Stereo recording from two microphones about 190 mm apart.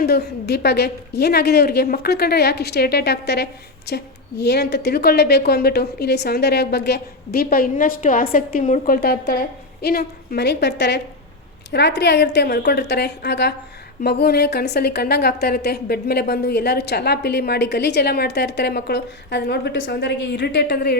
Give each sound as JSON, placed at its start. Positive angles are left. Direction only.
{"t": 0.0, "sound": "a woman's voice", "side_deg": 60}
{"t": 9.0, "sound": "a woman's voice", "side_deg": 55}